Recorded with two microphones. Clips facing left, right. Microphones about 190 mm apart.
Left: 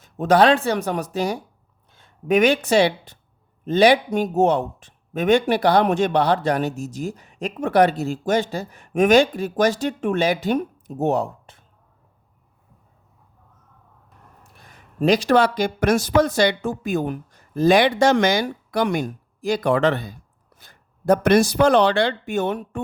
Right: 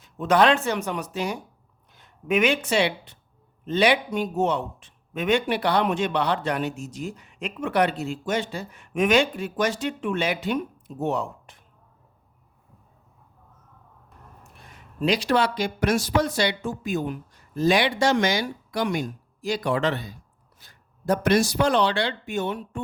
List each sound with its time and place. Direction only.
0.0 s speech: 40° left (ahead or behind)
14.7 s speech: 45° left (ahead or behind)